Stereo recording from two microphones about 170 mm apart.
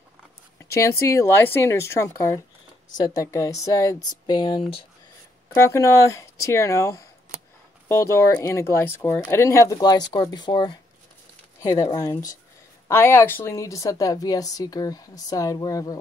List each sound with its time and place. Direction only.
0.7 s a woman's voice: 15° left (ahead or behind); by 4.8 s 35° left (ahead or behind)
5.5 s a woman's voice: 20° left (ahead or behind)